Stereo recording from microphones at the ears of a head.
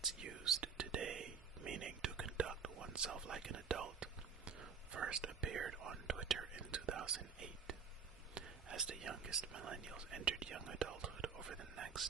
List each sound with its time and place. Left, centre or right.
0.0 s whispering: right
8.4 s speech: right